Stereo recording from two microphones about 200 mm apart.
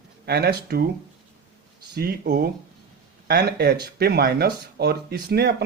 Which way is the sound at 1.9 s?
50° right (ahead or behind).